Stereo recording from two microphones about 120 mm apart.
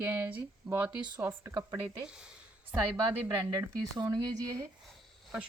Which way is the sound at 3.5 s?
30° right (ahead or behind).